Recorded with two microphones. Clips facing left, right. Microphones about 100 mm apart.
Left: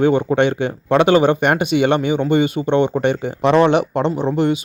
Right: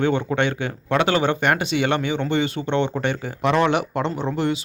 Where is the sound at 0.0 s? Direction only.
15° left (ahead or behind).